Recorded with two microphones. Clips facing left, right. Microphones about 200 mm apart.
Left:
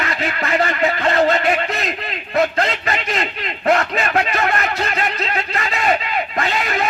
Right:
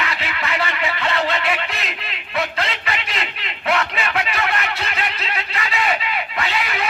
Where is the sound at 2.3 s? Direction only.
45° left (ahead or behind).